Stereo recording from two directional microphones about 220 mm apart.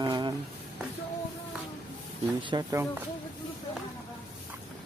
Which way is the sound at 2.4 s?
20° right (ahead or behind).